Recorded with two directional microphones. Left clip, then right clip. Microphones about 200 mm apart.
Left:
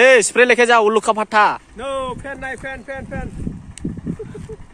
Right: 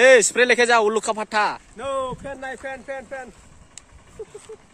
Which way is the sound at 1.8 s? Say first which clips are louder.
Left 2 dB; 10° right (ahead or behind).